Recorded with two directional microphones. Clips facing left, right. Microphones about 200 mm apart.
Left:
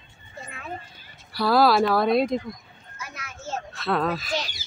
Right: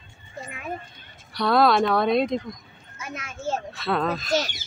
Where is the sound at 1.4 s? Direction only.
5° left (ahead or behind).